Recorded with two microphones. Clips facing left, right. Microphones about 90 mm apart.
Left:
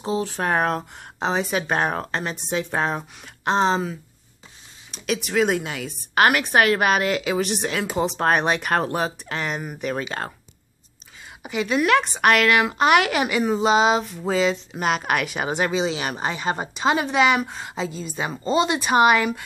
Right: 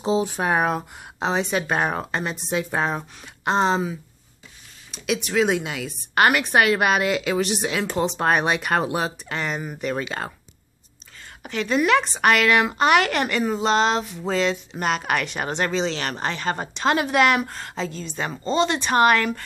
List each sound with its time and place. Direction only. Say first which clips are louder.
0.0 s a sound: right 3 dB; 20° right (ahead or behind)
0.4 s speech: even; 5° right (ahead or behind)
11.4 s speech: even; 5° left (ahead or behind)